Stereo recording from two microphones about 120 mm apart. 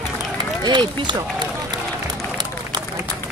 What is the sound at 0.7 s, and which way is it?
Speech, 40° right (ahead or behind).